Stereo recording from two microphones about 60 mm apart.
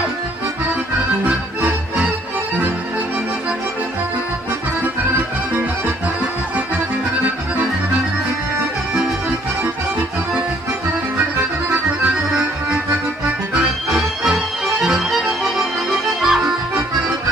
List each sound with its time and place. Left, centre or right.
13.8 s music: centre
16.2 s accordion: centre